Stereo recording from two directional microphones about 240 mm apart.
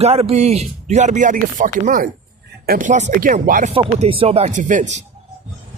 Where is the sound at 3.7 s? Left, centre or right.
Right.